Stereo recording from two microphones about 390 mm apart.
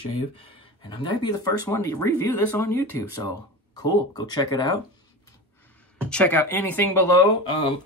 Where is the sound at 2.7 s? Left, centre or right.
Left.